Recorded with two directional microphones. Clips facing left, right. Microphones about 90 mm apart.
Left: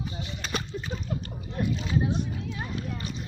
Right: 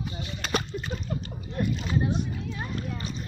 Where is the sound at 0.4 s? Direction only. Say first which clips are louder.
Right 5 dB; 65° right (ahead or behind).